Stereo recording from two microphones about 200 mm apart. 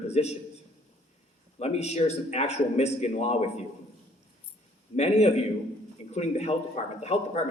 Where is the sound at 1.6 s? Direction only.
30° left (ahead or behind).